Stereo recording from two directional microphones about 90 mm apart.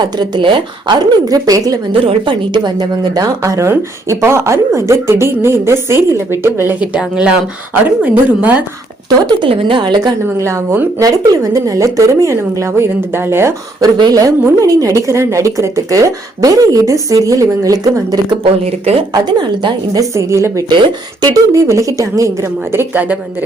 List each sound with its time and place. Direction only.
0.0 s a woman's voice: 55° right (ahead or behind)
1.9 s a woman's voice: 70° right (ahead or behind); by 3.2 s 55° right (ahead or behind)
3.4 s a woman's voice: 35° right (ahead or behind)
6.7 s a woman's voice: 10° right (ahead or behind)
9.0 s a woman's voice: 50° right (ahead or behind)
9.5 s a woman's voice: 75° right (ahead or behind); by 10.2 s 55° right (ahead or behind)
10.3 s speech: 35° right (ahead or behind)
13.8 s a woman's voice: 45° right (ahead or behind)
19.1 s a woman's voice: 55° right (ahead or behind)
20.1 s speech: 35° right (ahead or behind)
20.7 s speech: 50° right (ahead or behind); by 23.0 s 25° right (ahead or behind)